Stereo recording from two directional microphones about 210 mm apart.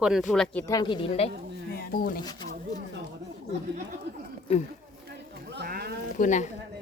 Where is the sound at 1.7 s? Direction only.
45° left (ahead or behind).